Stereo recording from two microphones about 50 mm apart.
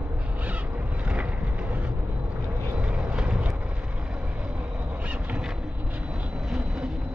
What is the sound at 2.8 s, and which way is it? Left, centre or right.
Vehicle, right.